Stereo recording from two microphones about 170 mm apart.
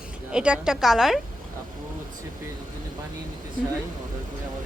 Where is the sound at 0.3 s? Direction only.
5° right (ahead or behind).